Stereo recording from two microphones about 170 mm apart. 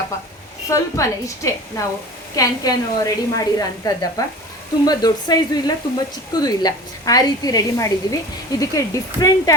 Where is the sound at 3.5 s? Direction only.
20° left (ahead or behind).